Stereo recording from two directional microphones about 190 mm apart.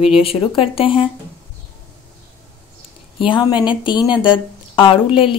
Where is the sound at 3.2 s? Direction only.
25° left (ahead or behind).